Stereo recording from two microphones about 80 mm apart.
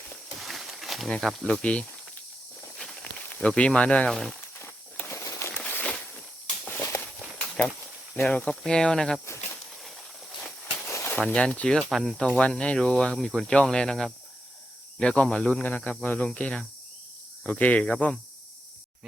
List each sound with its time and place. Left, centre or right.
0.3 s wild animals: centre
1.1 s speech: centre
1.5 s speech: centre
2.7 s walk: centre
3.2 s speech: centre
4.4 s a sound: left
5.7 s walk: centre
7.3 s a sound: centre
8.2 s speech: centre
10.8 s a sound: left
11.2 s speech: centre
11.8 s speech: centre
12.1 s speech: centre